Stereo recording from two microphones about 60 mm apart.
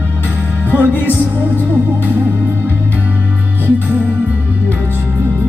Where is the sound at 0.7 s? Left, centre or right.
Left.